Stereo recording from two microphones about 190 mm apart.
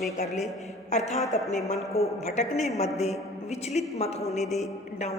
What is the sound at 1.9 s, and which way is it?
A man's voice, 35° left (ahead or behind).